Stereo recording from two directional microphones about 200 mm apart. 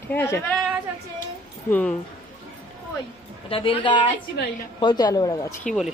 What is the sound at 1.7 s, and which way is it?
Speech, 5° left (ahead or behind).